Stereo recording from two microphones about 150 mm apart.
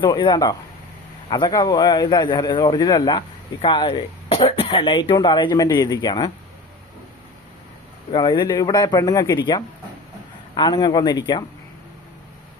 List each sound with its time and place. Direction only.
0.0 s a man's voice: 30° left (ahead or behind)
8.1 s a man's voice: 30° left (ahead or behind)